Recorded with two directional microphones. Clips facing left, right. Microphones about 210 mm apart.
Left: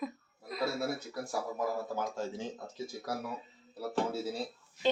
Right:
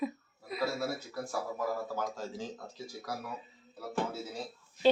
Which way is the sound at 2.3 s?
25° left (ahead or behind).